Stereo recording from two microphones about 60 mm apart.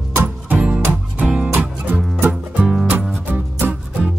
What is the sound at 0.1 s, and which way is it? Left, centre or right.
Music, right.